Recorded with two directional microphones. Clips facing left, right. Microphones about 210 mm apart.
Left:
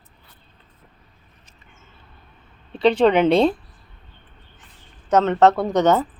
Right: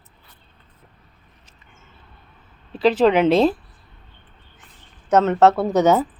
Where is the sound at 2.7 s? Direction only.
5° right (ahead or behind).